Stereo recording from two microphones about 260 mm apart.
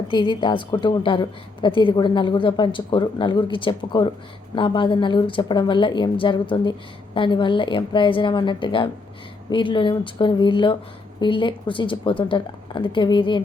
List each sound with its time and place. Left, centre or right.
0.1 s a woman's voice: centre